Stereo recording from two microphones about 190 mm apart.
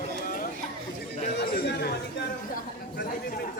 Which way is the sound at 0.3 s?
45° left (ahead or behind).